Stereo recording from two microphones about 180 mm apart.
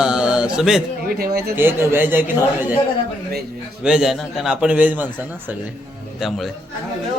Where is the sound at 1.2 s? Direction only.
60° right (ahead or behind).